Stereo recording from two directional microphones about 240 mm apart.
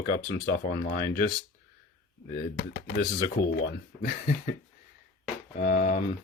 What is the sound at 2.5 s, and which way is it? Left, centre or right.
Speech, left.